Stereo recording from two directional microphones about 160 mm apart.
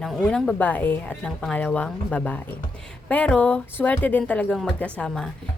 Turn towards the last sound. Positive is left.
turn(degrees=0)  # may be behind; listen again after turning